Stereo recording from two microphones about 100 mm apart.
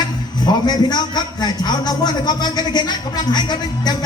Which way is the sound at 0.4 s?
45° left (ahead or behind).